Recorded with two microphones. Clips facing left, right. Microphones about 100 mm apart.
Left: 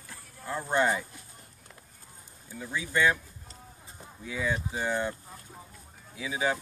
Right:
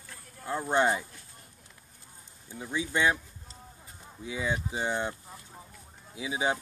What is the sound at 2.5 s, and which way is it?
Speech, 20° right (ahead or behind).